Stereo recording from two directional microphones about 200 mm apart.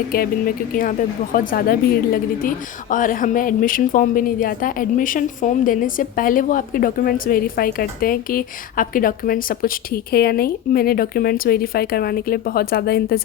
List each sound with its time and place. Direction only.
0.1 s a woman's voice: 45° left (ahead or behind)
2.9 s a woman's voice: 40° left (ahead or behind)